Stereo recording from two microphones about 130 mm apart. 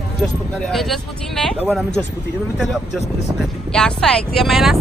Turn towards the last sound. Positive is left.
turn(degrees=0)  # may be behind; listen again after turning